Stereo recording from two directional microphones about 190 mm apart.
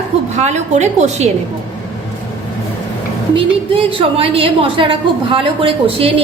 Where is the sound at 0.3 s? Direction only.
35° right (ahead or behind).